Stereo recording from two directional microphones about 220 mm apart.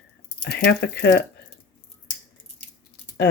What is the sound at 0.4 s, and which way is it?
Speech, 50° left (ahead or behind).